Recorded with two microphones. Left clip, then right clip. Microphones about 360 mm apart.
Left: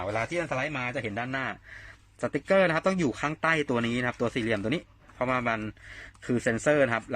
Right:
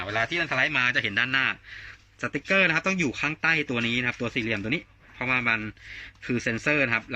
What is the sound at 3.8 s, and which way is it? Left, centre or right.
Speech, left.